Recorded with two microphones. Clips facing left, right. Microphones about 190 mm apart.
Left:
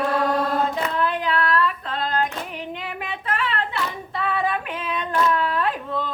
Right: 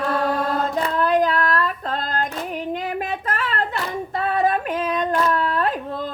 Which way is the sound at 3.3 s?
40° right (ahead or behind).